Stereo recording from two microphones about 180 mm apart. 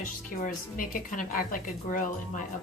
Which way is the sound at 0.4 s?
50° left (ahead or behind).